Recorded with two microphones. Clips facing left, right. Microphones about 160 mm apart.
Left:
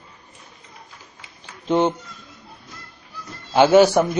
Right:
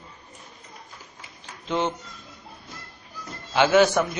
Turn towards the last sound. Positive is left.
turn(degrees=30)  # may be behind; listen again after turning